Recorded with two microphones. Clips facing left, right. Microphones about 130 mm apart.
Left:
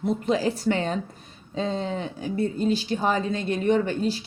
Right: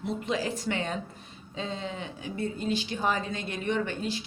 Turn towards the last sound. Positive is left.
turn(degrees=35)  # may be behind; listen again after turning